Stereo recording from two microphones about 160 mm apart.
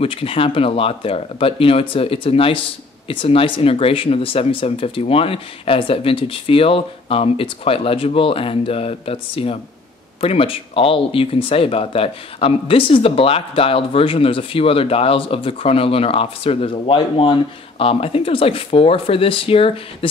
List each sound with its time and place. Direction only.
0.0 s speech: 35° left (ahead or behind)